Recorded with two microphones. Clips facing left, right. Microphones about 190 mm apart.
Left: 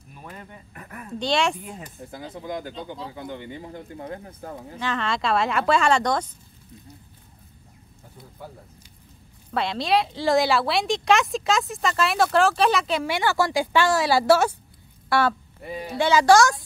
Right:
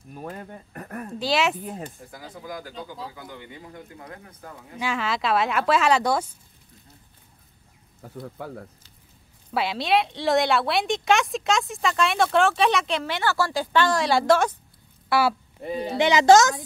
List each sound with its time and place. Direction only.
0.1 s speech: 45° right (ahead or behind)
1.2 s a woman's voice: 5° right (ahead or behind)
2.0 s speech: 25° left (ahead or behind)
4.7 s a woman's voice: 10° right (ahead or behind)
8.2 s speech: 80° right
9.5 s a woman's voice: 5° right (ahead or behind)
15.0 s speech: 5° right (ahead or behind)
15.6 s speech: 20° right (ahead or behind)